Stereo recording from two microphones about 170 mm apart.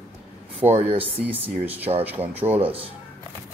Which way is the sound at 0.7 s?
35° right (ahead or behind).